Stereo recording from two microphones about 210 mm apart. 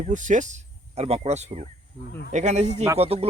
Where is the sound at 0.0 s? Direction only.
35° right (ahead or behind).